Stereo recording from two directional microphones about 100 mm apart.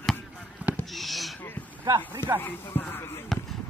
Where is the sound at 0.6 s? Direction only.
15° right (ahead or behind).